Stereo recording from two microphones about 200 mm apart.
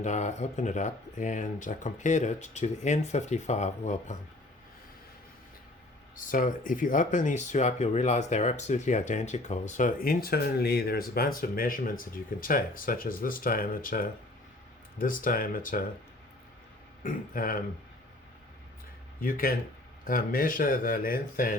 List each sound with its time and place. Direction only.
0.0 s speech: 35° left (ahead or behind)
6.1 s speech: 40° left (ahead or behind)
17.0 s speech: 45° left (ahead or behind)
19.2 s speech: 45° left (ahead or behind)